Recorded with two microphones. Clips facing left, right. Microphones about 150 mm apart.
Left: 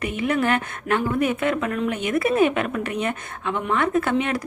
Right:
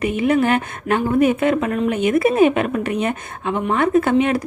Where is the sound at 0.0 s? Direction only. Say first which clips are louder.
Right 5 dB; 15° right (ahead or behind).